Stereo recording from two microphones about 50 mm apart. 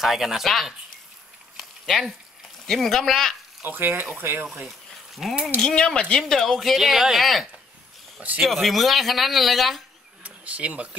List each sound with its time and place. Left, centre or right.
0.0 s speech: centre
1.9 s speech: centre
3.6 s speech: right
4.6 s a sound: centre
5.6 s speech: centre
6.2 s speech: centre
10.2 s speech: right